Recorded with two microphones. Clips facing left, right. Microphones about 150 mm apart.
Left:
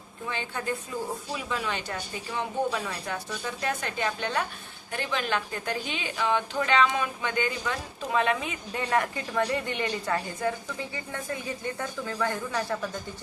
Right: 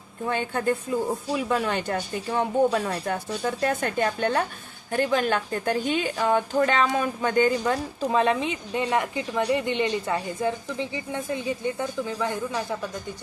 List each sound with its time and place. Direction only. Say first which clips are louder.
0.3 s a woman's voice: right 7 dB; 50° right (ahead or behind); by 12.6 s 15° right (ahead or behind)